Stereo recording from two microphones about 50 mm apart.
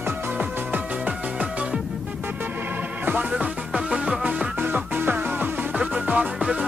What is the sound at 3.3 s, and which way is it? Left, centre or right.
Music, centre.